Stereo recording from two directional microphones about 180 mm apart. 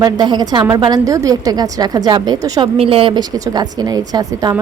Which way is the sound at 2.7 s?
30° right (ahead or behind).